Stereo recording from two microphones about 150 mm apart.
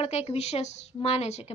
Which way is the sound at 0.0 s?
45° left (ahead or behind).